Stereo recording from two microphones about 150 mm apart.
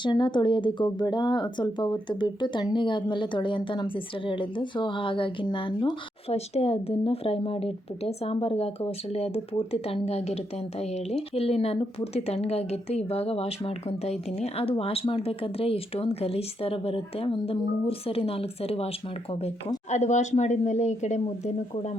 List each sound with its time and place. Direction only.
0.0 s speech: 30° left (ahead or behind)
19.9 s speech: 50° left (ahead or behind)